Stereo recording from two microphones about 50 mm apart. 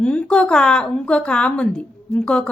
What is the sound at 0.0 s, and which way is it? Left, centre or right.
A woman's voice, centre.